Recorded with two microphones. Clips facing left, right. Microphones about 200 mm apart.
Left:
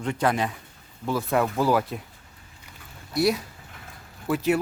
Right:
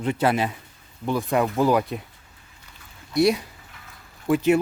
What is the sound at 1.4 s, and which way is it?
Speech, 15° right (ahead or behind).